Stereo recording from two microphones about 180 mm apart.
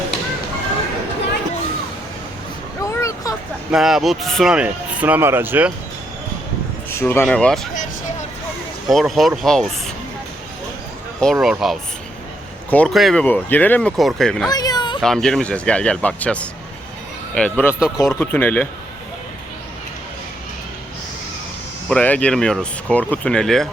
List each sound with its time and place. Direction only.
2.8 s a sound: 15° left (ahead or behind)
3.7 s speech: centre (ahead or behind)
6.9 s speech: 15° left (ahead or behind)
8.9 s speech: centre (ahead or behind)
11.2 s speech: centre (ahead or behind)
14.4 s a sound: 20° left (ahead or behind)
15.0 s speech: 5° left (ahead or behind)
17.7 s speech: 5° right (ahead or behind)
18.1 s speech: 10° left (ahead or behind)
21.8 s speech: 5° left (ahead or behind)